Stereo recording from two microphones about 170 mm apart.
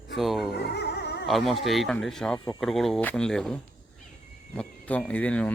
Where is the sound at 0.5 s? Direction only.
75° left (ahead or behind).